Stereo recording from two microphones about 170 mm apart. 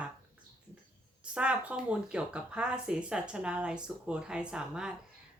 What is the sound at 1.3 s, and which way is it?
Speech, 5° right (ahead or behind).